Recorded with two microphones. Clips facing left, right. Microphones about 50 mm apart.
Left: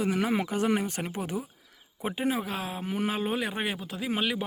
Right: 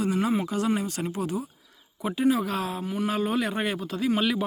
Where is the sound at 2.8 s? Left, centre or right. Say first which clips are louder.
Right 2 dB; left.